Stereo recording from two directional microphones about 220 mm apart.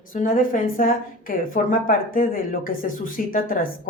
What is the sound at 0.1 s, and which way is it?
Speech, 40° left (ahead or behind).